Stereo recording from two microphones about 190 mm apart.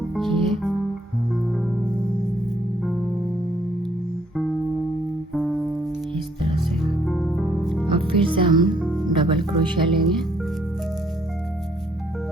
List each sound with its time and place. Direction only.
0.1 s music: centre (ahead or behind)
5.3 s music: centre (ahead or behind)
6.4 s music: 25° right (ahead or behind)
7.0 s music: centre (ahead or behind)
7.9 s music: 25° right (ahead or behind)
9.0 s speech: 25° right (ahead or behind)